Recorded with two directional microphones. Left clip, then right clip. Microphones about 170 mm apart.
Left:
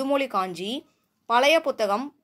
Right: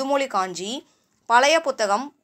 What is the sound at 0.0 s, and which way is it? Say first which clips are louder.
Speech: right 2 dB; 45° left (ahead or behind).